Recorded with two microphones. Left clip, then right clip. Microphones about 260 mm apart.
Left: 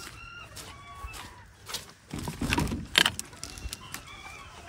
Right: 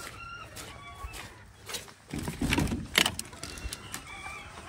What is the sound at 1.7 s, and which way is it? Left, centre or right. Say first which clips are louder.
Vehicle: even; centre.